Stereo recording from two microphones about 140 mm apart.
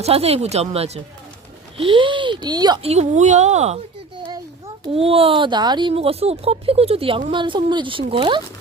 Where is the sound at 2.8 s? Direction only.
50° right (ahead or behind).